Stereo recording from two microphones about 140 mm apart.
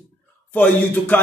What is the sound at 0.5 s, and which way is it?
Speech, 15° left (ahead or behind).